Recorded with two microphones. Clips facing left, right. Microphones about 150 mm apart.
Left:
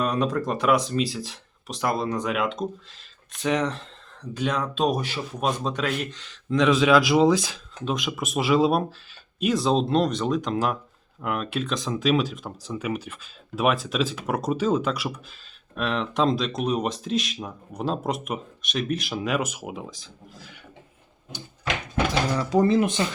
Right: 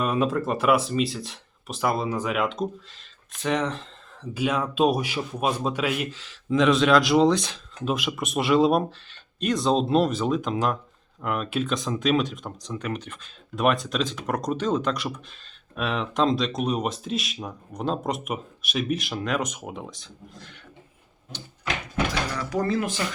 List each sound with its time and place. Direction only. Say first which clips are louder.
0.0 s speech: even; 5° right (ahead or behind)
22.4 s speech: left 6 dB; 25° left (ahead or behind)